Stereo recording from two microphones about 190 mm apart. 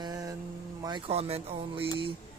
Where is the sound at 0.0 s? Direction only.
20° right (ahead or behind).